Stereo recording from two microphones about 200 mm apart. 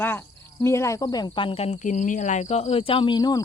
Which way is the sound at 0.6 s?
15° left (ahead or behind).